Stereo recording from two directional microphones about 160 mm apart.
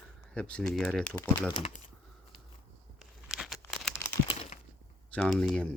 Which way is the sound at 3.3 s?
Centre (ahead or behind).